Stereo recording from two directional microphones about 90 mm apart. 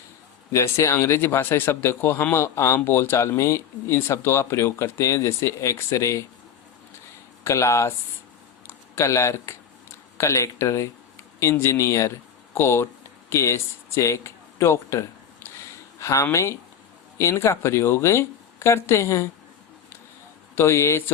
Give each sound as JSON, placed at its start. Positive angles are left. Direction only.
{"t": 0.5, "sound": "speech", "side_deg": 35}
{"t": 7.4, "sound": "speech", "side_deg": 35}
{"t": 8.6, "sound": "a sound", "side_deg": 30}
{"t": 10.2, "sound": "speech", "side_deg": 35}
{"t": 15.4, "sound": "a sound", "side_deg": 30}
{"t": 17.2, "sound": "speech", "side_deg": 35}
{"t": 20.6, "sound": "speech", "side_deg": 30}